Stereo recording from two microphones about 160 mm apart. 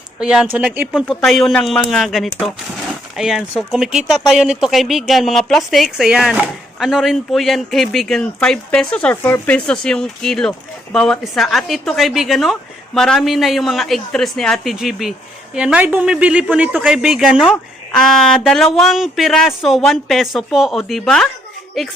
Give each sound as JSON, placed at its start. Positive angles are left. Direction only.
{"t": 0.2, "sound": "speech", "side_deg": -5}